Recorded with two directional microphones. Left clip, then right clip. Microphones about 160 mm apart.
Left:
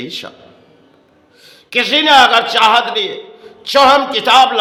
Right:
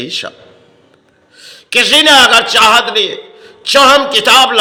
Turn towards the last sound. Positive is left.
turn(degrees=-10)  # may be behind; listen again after turning